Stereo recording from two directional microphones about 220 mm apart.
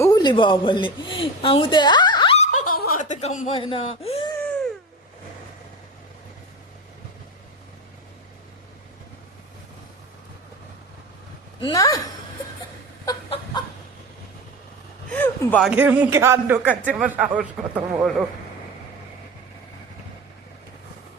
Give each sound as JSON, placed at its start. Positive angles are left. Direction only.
{"t": 0.0, "sound": "a man's voice", "side_deg": 20}
{"t": 11.6, "sound": "speech", "side_deg": 15}
{"t": 13.1, "sound": "chicken", "side_deg": 20}
{"t": 15.1, "sound": "a sound", "side_deg": 5}
{"t": 15.7, "sound": "speech", "side_deg": -5}